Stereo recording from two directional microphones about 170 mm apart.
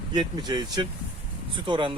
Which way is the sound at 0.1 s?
25° right (ahead or behind).